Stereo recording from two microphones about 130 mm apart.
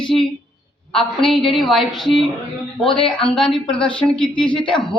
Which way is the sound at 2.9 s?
45° left (ahead or behind).